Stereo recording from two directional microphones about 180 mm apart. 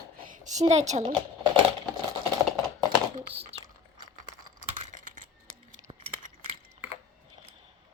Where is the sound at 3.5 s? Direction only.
35° right (ahead or behind).